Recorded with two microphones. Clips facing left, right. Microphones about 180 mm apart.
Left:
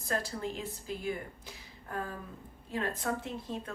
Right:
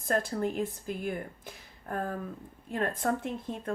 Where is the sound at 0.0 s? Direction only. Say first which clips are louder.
Right 6 dB; 55° right (ahead or behind).